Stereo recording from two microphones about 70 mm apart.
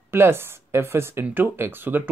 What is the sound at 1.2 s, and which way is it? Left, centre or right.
Speech, right.